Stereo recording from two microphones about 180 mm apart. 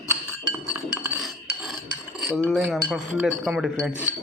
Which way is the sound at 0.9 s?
15° right (ahead or behind).